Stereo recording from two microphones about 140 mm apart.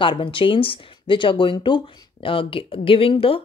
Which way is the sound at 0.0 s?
35° left (ahead or behind).